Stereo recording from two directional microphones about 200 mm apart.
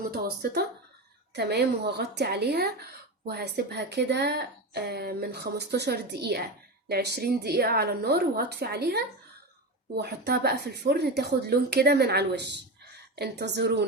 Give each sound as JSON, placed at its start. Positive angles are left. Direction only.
{"t": 0.0, "sound": "a woman's voice", "side_deg": -55}